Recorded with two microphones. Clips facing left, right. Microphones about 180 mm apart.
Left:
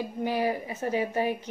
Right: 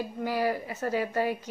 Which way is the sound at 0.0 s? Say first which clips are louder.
Left 1 dB; 20° left (ahead or behind).